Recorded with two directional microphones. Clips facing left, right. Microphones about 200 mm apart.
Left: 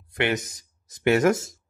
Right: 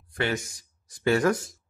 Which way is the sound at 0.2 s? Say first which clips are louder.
Left 3 dB; 20° left (ahead or behind).